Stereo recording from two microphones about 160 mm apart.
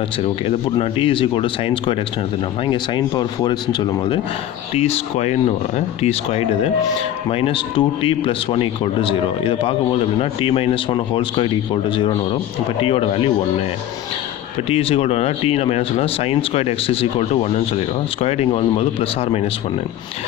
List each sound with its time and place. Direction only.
0.2 s speech: 35° left (ahead or behind)
4.7 s speech: 40° left (ahead or behind)
14.7 s speech: 35° left (ahead or behind)